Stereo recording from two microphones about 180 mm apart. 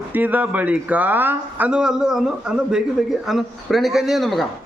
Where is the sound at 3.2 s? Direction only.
Centre (ahead or behind).